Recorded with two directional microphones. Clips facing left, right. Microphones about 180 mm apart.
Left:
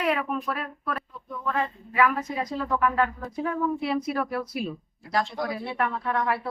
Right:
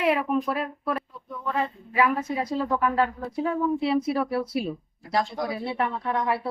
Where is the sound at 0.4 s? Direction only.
25° right (ahead or behind).